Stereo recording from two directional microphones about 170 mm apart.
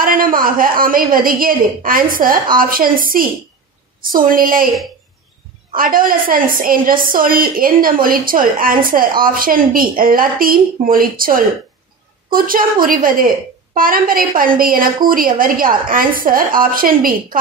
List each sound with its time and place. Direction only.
0.0 s a woman's voice: 55° right (ahead or behind)
5.8 s a woman's voice: 55° right (ahead or behind)